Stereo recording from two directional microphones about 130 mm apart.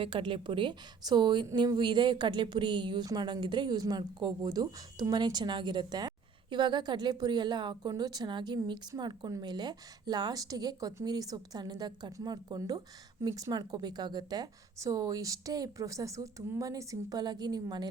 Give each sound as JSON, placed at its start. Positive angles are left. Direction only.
{"t": 0.0, "sound": "a woman's voice", "side_deg": -40}